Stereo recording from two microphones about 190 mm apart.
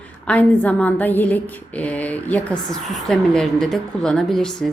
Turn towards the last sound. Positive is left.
turn(degrees=0)  # may be behind; listen again after turning